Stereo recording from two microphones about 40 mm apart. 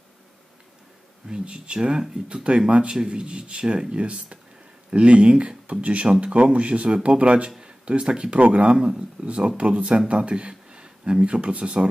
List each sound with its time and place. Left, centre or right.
1.3 s speech: right
5.7 s speech: right
6.0 s speech: centre
6.3 s speech: right
8.7 s speech: right